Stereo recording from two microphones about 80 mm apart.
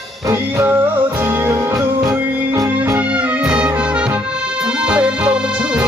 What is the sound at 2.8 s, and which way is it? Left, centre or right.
Music, right.